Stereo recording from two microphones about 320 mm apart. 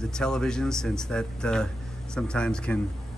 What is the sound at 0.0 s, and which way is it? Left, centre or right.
Speech, centre.